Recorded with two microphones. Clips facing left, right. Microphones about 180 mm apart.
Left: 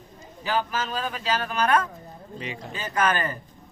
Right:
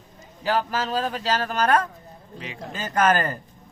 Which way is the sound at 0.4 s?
35° right (ahead or behind).